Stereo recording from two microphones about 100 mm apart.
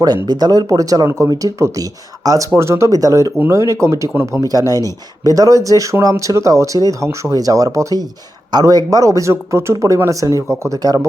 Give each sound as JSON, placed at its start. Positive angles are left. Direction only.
{"t": 0.0, "sound": "speech", "side_deg": -45}